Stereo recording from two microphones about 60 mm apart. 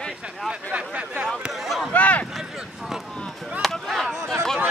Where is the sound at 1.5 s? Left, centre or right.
Centre.